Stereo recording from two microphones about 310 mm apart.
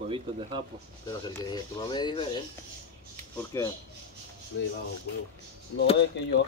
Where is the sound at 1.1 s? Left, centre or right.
Centre.